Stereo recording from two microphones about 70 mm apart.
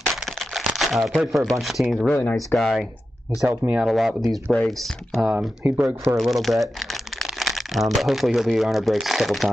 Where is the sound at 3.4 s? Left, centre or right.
Right.